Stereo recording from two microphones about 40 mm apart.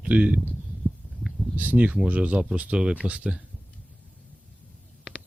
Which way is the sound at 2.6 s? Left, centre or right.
Right.